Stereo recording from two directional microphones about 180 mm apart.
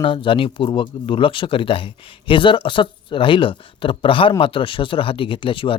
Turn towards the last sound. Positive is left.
turn(degrees=30)  # may be behind; listen again after turning